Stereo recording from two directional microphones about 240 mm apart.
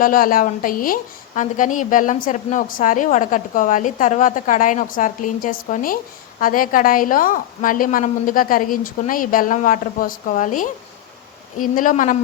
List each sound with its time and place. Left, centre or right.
0.0 s a woman's voice: left